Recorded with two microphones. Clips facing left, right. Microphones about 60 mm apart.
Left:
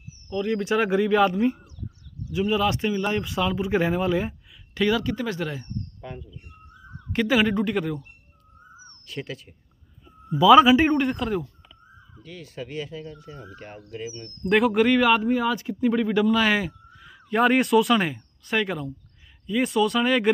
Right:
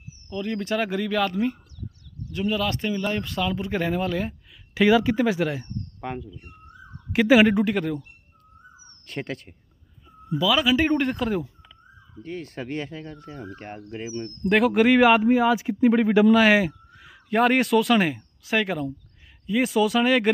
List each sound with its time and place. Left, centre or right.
0.4 s speech: centre
4.7 s speech: centre
5.9 s bird: right
7.1 s speech: centre
7.7 s speech: centre
9.0 s speech: right
10.4 s a man's voice: left
10.9 s speech: centre
12.2 s speech: right
14.4 s speech: centre
14.9 s speech: centre
16.3 s speech: centre